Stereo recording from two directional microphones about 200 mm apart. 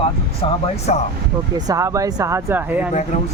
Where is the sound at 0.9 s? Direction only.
35° left (ahead or behind).